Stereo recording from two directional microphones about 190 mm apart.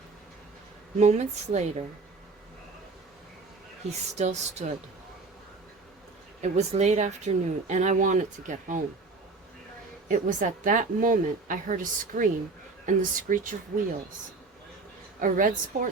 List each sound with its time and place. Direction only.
0.9 s speech: 35° right (ahead or behind)
3.8 s speech: 35° right (ahead or behind)
6.4 s speech: 35° right (ahead or behind)
10.1 s a woman's voice: 45° right (ahead or behind)
15.2 s a woman's voice: 45° right (ahead or behind)